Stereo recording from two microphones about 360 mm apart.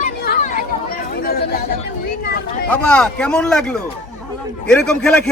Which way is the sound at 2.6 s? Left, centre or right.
Centre.